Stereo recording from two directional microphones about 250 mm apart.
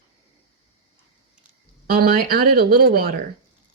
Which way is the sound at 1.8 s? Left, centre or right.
Right.